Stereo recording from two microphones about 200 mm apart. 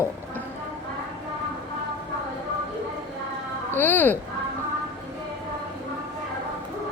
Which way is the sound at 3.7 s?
10° left (ahead or behind).